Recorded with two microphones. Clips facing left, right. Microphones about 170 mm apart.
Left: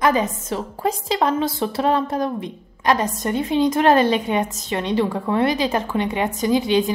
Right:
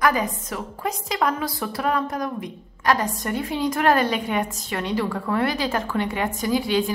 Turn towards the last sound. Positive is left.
turn(degrees=20)  # may be behind; listen again after turning